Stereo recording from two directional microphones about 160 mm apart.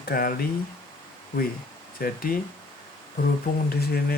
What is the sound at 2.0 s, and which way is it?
Speech, 65° left (ahead or behind).